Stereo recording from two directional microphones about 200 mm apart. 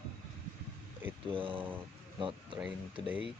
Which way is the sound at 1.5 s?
10° right (ahead or behind).